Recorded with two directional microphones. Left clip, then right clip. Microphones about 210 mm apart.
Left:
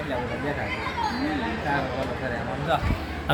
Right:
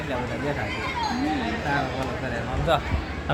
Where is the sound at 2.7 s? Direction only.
30° right (ahead or behind).